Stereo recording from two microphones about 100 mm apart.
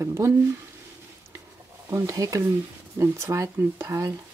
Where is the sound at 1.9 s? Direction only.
35° right (ahead or behind).